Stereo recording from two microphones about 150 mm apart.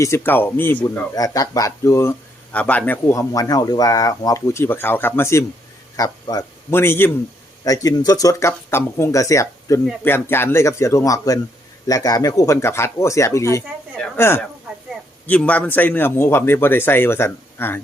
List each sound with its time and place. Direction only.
0.0 s a man's voice: 15° left (ahead or behind)
1.1 s a man's voice: 25° left (ahead or behind)